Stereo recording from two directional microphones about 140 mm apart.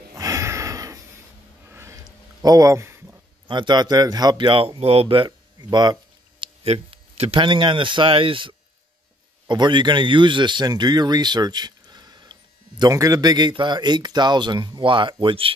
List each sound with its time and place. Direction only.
0.1 s a sound: 25° right (ahead or behind)
3.4 s speech: 35° right (ahead or behind)
6.4 s speech: 45° right (ahead or behind)